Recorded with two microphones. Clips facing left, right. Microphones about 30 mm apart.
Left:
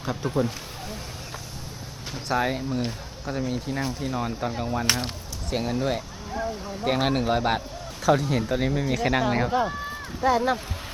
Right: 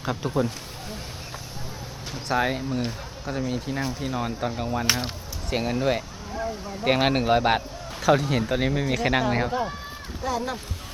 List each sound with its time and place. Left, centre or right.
0.0 s speech: centre
2.1 s speech: centre
5.5 s speech: centre
6.3 s speech: centre
6.8 s speech: right
9.2 s speech: centre
9.5 s speech: centre
10.2 s speech: centre